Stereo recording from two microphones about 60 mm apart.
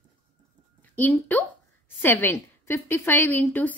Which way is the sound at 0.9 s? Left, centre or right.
Left.